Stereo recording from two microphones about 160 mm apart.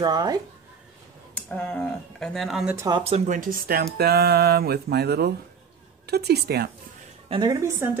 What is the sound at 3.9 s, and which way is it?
A woman's voice, 80° right.